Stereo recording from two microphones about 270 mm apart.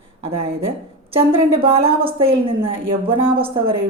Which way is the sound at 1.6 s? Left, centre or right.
Right.